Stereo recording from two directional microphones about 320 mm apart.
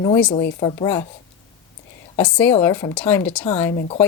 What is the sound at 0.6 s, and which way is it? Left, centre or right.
Speech, centre.